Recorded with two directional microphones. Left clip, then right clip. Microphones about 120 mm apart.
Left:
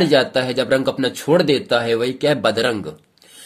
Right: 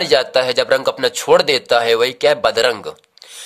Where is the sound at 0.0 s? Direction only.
60° right (ahead or behind).